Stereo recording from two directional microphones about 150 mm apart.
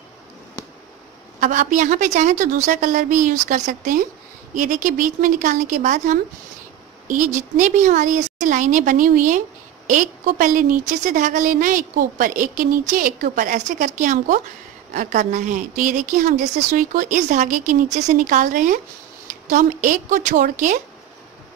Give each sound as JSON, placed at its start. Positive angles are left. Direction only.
{"t": 1.4, "sound": "a woman's voice", "side_deg": -55}